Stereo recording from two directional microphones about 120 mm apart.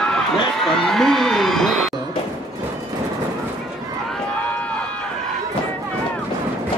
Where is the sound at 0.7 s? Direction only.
5° left (ahead or behind).